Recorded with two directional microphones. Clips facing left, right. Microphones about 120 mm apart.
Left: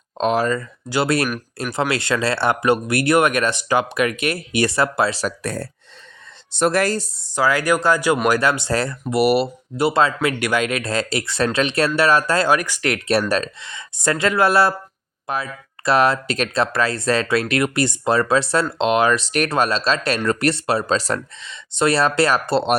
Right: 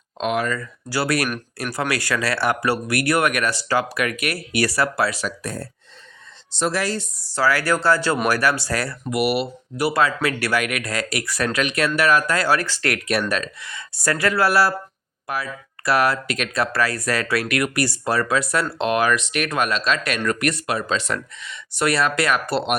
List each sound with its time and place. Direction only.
0.2 s speech: 30° left (ahead or behind)
5.4 s speech: 70° left (ahead or behind)
6.5 s speech: 55° left (ahead or behind)
7.2 s speech: 20° left (ahead or behind); by 9.5 s 40° left (ahead or behind)
9.7 s speech: 25° left (ahead or behind)
12.5 s speech: 15° left (ahead or behind)
13.1 s speech: 35° left (ahead or behind)